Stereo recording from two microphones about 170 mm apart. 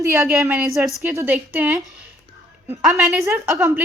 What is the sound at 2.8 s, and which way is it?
Speech, centre (ahead or behind).